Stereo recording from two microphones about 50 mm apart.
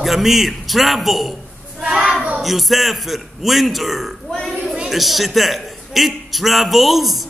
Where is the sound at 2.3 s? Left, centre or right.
Centre.